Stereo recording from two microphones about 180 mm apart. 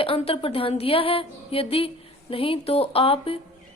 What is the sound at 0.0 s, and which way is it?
A woman's voice, 30° left (ahead or behind).